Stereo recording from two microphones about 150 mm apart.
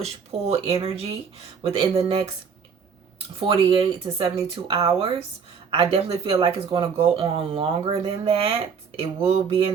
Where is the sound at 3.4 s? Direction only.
35° right (ahead or behind).